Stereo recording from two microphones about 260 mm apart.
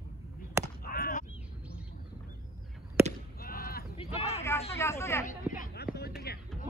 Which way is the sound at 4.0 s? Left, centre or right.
Left.